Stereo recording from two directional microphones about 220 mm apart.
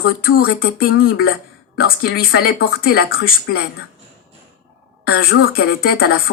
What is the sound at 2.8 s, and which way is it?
Speech, 45° left (ahead or behind).